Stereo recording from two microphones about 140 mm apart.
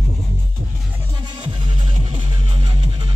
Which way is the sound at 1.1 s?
30° right (ahead or behind).